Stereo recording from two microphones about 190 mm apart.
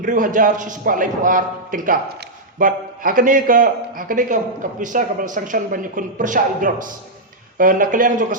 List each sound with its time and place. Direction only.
0.0 s speech: 45° right (ahead or behind)